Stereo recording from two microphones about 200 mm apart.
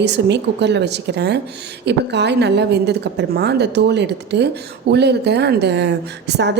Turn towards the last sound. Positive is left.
turn(degrees=-60)  # may be behind; listen again after turning